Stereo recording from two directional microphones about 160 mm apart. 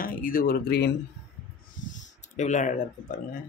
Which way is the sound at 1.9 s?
50° left (ahead or behind).